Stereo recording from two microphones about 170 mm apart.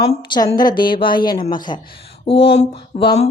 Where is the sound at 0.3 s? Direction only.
25° left (ahead or behind).